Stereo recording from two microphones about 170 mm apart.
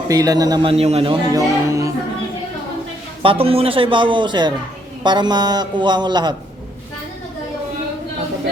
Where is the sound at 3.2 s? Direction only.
30° right (ahead or behind).